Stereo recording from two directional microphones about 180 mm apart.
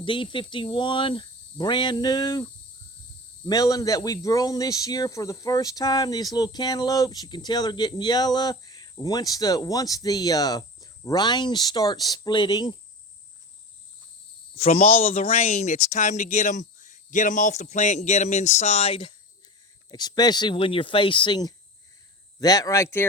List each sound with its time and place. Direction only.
0.0 s speech: 30° left (ahead or behind)
14.5 s speech: 35° left (ahead or behind)
19.9 s speech: 25° left (ahead or behind)